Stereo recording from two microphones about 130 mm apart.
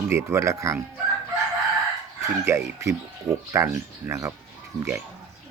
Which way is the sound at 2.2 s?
20° right (ahead or behind).